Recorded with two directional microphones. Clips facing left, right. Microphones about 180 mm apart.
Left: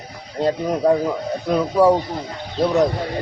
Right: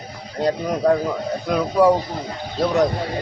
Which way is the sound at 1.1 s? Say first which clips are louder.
Left 1 dB; centre (ahead or behind).